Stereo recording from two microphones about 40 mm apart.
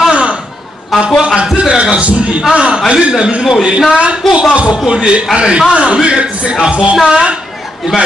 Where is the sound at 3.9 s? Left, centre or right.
Right.